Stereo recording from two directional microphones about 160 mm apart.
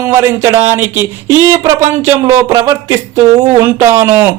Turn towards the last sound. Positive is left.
turn(degrees=-15)  # may be behind; listen again after turning